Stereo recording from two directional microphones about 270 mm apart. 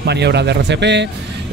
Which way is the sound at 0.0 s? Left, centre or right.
Right.